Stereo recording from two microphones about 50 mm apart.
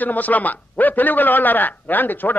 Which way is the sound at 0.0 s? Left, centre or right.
Left.